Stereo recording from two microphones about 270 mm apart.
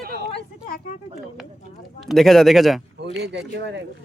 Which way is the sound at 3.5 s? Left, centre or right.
Right.